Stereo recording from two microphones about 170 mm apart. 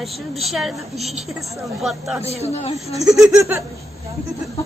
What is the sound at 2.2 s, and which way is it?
Speech, 40° left (ahead or behind).